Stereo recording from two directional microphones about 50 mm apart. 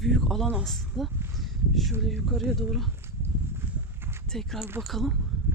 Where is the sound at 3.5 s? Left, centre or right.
Right.